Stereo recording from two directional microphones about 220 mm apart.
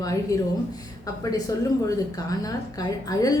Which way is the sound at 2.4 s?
15° left (ahead or behind).